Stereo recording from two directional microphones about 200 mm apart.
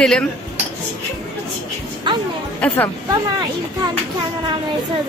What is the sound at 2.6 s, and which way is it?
Speech, 10° left (ahead or behind).